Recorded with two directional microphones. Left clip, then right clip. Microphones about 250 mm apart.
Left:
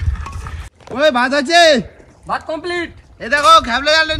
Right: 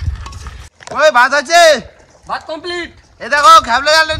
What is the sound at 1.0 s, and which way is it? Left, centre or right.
Speech, right.